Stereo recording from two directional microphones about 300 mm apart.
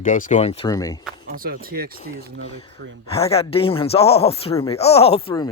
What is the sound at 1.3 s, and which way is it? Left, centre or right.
Speech, right.